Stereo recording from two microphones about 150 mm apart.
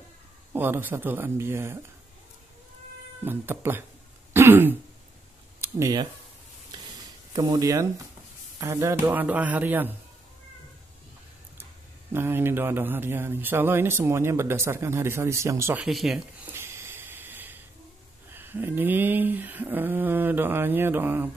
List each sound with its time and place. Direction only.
0.5 s speech: 15° right (ahead or behind)
3.3 s speech: 15° right (ahead or behind)
4.3 s throat clearing: 15° right (ahead or behind)
5.6 s speech: 20° right (ahead or behind)
7.3 s speech: 25° right (ahead or behind)
12.1 s speech: 15° right (ahead or behind)
15.8 s speech: centre (ahead or behind)
16.5 s a sound: 15° right (ahead or behind)
18.3 s speech: 15° right (ahead or behind)